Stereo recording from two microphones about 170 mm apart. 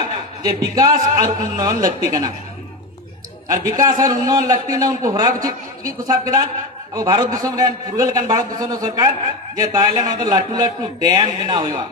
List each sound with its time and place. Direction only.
0.0 s a sound: 20° right (ahead or behind)
1.1 s a man's voice: 20° right (ahead or behind)
3.4 s a man's voice: 20° right (ahead or behind)